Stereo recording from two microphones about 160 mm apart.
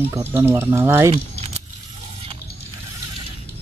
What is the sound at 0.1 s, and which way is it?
Speech, 15° right (ahead or behind).